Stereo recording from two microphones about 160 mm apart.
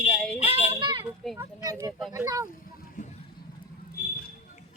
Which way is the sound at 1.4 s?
20° right (ahead or behind).